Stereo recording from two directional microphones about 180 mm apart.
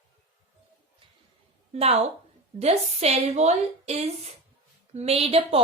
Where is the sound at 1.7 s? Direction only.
35° right (ahead or behind).